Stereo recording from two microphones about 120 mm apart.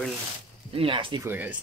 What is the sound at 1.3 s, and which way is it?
Speech, 15° right (ahead or behind).